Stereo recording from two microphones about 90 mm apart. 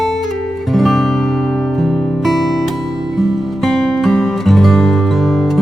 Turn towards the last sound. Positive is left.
turn(degrees=0)  # may be behind; listen again after turning